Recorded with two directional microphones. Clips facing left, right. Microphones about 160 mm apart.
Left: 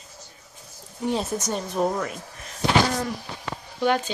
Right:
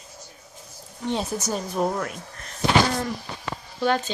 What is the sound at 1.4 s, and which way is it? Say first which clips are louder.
Speech: even; centre (ahead or behind).